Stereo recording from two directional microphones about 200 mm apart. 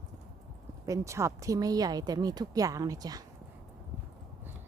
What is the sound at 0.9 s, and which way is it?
Speech, 15° right (ahead or behind).